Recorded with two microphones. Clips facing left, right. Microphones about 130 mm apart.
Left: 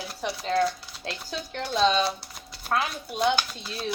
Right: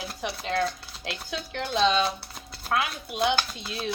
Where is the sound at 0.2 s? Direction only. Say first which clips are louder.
Left 3 dB; 40° left (ahead or behind).